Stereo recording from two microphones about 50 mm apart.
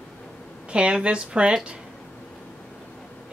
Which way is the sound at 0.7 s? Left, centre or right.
Right.